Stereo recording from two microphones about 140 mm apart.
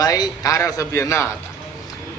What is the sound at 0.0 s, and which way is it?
A man's voice, 25° left (ahead or behind).